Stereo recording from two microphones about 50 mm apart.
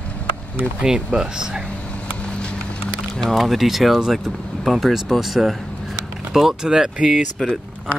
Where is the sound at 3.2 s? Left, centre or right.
Centre; by 7.2 s right.